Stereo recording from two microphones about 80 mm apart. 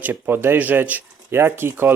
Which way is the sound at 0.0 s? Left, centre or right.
Right.